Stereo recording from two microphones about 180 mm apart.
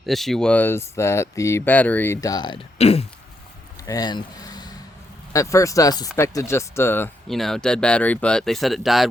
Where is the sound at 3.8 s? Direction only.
20° left (ahead or behind).